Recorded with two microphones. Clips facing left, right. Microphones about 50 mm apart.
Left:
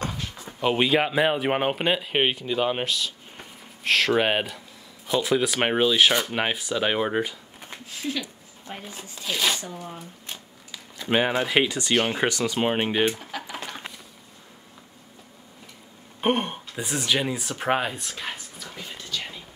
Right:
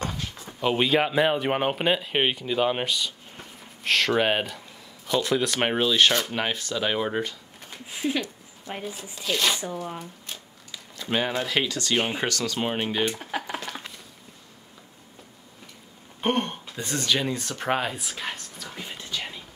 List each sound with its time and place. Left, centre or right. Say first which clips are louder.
0.0 s a sound: even; centre
0.5 s speech: left 1 dB; centre
3.3 s a sound: even; centre
5.0 s speech: left 1 dB; centre
7.8 s speech: right 4 dB; right
9.2 s speech: right 1 dB; centre
9.6 s speech: right 4 dB; centre
10.7 s speech: left 4 dB; centre
13.2 s speech: right 4 dB; right
16.2 s speech: left 1 dB; centre
18.8 s whispering: even; centre